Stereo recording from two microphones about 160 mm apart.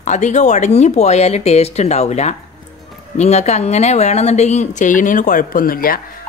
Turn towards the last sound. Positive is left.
turn(degrees=65)  # may be behind; listen again after turning